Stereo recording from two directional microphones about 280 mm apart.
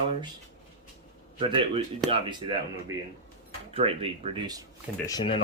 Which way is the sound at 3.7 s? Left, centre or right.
Centre.